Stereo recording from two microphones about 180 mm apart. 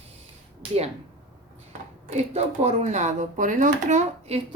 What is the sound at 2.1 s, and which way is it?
Speech, 35° right (ahead or behind).